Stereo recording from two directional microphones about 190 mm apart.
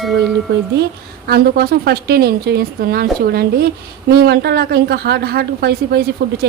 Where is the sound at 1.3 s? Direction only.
55° right (ahead or behind).